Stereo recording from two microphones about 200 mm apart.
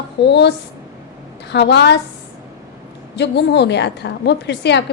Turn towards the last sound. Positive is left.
turn(degrees=60)  # may be behind; listen again after turning